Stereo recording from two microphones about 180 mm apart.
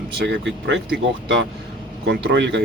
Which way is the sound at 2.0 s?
85° right.